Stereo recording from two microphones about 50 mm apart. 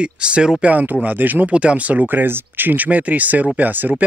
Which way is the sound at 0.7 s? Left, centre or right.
Right.